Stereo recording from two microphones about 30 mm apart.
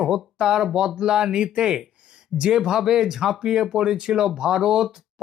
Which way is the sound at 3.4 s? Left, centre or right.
Right.